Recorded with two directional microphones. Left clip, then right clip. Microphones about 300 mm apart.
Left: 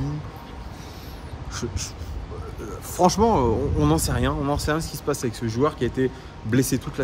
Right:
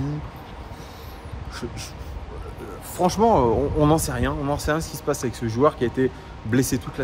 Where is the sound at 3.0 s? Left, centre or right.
Centre.